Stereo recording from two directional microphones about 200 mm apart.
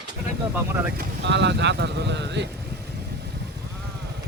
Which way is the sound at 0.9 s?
60° right (ahead or behind).